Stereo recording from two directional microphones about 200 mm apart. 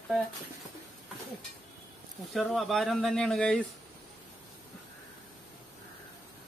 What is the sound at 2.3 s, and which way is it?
Speech, centre (ahead or behind).